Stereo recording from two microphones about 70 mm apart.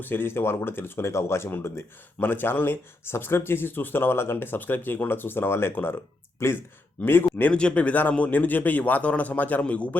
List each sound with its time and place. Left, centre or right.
0.0 s speech: left
7.5 s a man's voice: centre